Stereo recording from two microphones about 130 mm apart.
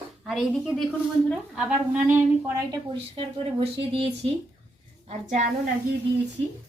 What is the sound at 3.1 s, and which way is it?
Speech, 45° right (ahead or behind).